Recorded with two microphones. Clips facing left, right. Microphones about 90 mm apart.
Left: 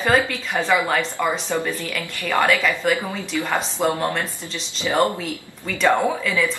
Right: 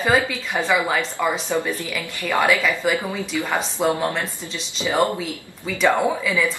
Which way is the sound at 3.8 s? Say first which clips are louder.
Right 1 dB; 5° right (ahead or behind).